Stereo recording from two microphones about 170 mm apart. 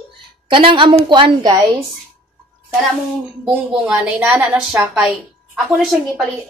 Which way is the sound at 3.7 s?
5° right (ahead or behind).